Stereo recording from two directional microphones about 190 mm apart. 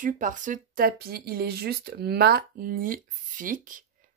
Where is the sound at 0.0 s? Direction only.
45° right (ahead or behind).